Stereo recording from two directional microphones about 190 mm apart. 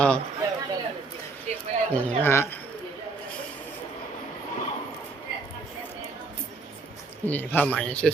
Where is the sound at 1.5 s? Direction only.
35° right (ahead or behind).